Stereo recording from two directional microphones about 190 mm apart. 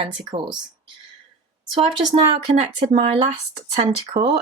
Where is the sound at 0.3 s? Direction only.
25° right (ahead or behind).